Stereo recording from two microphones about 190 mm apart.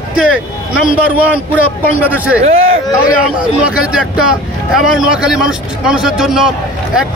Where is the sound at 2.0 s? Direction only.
10° right (ahead or behind).